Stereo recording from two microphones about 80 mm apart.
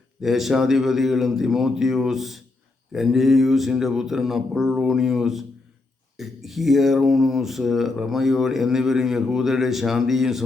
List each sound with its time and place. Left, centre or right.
0.2 s speech: centre